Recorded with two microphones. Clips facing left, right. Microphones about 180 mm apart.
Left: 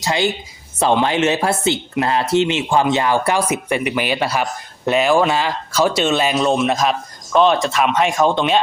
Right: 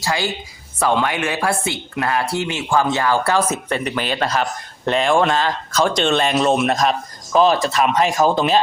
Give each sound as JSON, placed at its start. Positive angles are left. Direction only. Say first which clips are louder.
{"t": 0.0, "sound": "speech", "louder": "left 3 dB", "side_deg": 20}